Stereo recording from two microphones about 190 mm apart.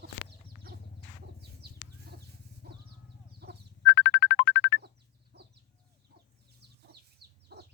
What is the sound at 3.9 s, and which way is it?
Music, 60° left (ahead or behind).